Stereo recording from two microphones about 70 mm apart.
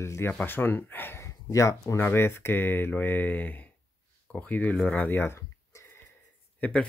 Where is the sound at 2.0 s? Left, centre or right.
Left.